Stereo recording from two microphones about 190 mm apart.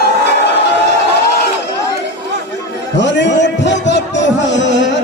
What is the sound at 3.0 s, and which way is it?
A man's voice, 70° left (ahead or behind).